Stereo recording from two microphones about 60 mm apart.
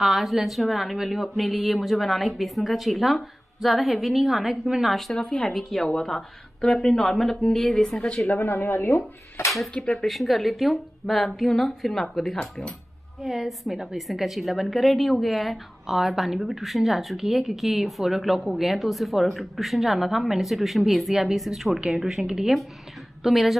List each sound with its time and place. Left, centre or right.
0.0 s a woman's voice: centre
5.1 s speech: centre
8.4 s speech: left
9.9 s a woman's voice: centre